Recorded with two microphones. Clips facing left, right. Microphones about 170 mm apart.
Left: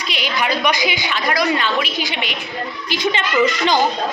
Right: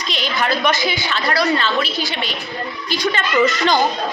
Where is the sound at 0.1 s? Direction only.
10° left (ahead or behind).